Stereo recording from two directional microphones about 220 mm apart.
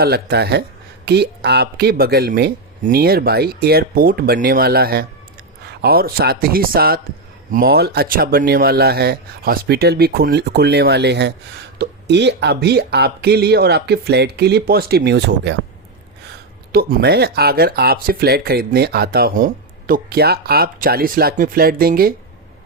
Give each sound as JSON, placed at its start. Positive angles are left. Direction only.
{"t": 0.0, "sound": "speech", "side_deg": -45}
{"t": 16.7, "sound": "speech", "side_deg": -45}